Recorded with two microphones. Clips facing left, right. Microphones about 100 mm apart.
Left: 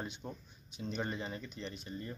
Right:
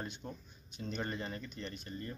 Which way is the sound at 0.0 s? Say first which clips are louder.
Left 1 dB; 15° left (ahead or behind).